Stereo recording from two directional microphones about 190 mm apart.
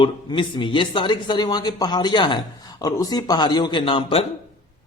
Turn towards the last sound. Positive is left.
turn(degrees=30)  # may be behind; listen again after turning